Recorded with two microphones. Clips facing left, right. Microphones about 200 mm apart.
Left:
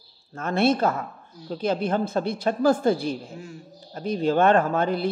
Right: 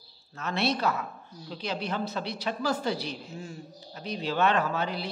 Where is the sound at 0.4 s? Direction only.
50° left (ahead or behind).